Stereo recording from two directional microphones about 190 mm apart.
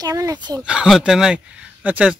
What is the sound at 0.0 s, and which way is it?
Speech, 20° right (ahead or behind).